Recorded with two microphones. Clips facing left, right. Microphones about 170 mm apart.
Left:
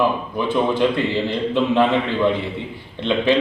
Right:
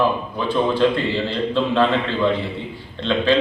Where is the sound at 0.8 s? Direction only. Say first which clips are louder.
Even; 15° left (ahead or behind).